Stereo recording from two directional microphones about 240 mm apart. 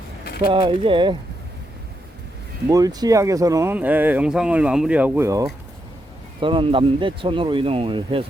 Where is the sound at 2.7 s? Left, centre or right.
Centre.